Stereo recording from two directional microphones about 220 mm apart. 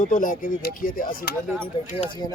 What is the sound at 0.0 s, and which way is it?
Speech, 35° left (ahead or behind).